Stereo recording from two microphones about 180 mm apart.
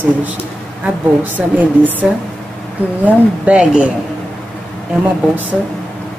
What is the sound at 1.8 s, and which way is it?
Speech, 10° right (ahead or behind).